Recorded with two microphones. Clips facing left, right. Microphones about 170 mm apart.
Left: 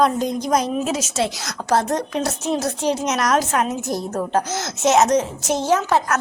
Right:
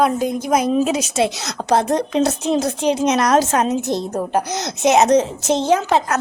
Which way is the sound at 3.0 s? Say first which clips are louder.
Right 7 dB; 30° right (ahead or behind).